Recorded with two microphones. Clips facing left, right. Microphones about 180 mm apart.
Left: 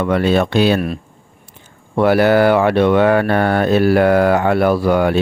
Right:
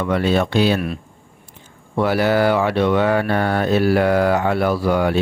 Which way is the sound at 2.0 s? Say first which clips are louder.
Left 5 dB; 60° left (ahead or behind).